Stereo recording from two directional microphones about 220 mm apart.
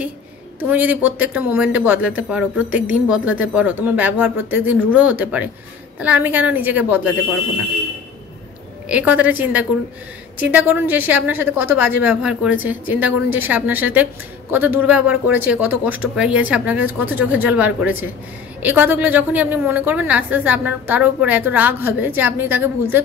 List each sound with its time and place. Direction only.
0.6 s a woman's voice: 5° right (ahead or behind)
8.8 s a woman's voice: 5° right (ahead or behind)